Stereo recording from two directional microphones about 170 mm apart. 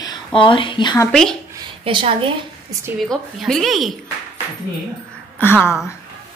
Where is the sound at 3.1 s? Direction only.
Centre (ahead or behind).